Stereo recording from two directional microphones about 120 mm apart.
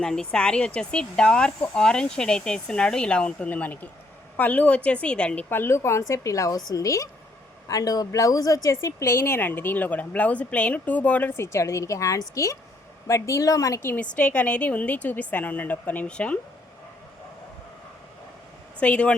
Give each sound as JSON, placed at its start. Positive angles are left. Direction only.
{"t": 0.0, "sound": "a woman's voice", "side_deg": 5}
{"t": 13.9, "sound": "speech", "side_deg": 10}
{"t": 18.8, "sound": "speech", "side_deg": 10}